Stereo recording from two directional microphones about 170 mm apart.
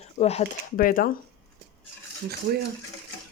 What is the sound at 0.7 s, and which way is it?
Speech, 55° left (ahead or behind).